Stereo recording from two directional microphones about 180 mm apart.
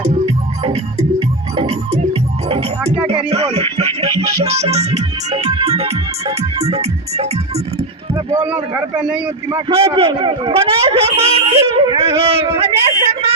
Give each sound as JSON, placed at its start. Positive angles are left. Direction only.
{"t": 0.6, "sound": "music", "side_deg": -35}
{"t": 3.1, "sound": "music", "side_deg": -30}
{"t": 4.4, "sound": "speech", "side_deg": -35}
{"t": 8.4, "sound": "a man's voice", "side_deg": -10}
{"t": 9.5, "sound": "speech", "side_deg": -20}